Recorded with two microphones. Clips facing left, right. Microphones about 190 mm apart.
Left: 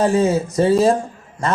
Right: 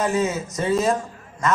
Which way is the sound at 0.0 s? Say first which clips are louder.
Left 6 dB; 30° left (ahead or behind).